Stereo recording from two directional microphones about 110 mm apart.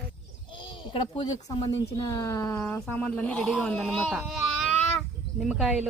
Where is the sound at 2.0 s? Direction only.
30° left (ahead or behind).